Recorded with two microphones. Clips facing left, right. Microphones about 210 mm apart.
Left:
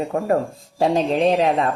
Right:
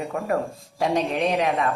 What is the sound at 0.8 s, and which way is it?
Speech, 30° left (ahead or behind).